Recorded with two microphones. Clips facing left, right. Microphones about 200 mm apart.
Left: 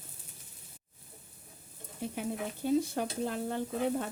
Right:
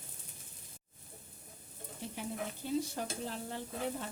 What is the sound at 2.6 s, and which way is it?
Frying, 55° left (ahead or behind).